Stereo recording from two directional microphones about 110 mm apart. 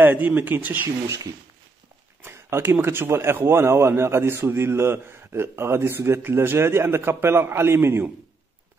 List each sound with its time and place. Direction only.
0.0 s speech: 15° right (ahead or behind)
2.2 s a man's voice: 20° right (ahead or behind)